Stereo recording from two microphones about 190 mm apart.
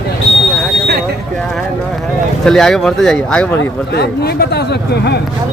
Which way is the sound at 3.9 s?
60° left (ahead or behind).